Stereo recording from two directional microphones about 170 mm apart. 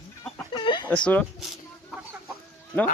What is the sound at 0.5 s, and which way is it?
Chicken, 30° left (ahead or behind).